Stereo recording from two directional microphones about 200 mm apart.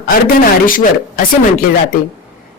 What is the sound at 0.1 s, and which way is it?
Speech, 45° left (ahead or behind).